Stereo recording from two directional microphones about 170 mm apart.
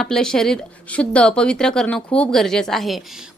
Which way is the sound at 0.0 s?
5° left (ahead or behind).